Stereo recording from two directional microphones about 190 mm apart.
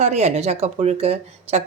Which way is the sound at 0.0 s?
35° right (ahead or behind).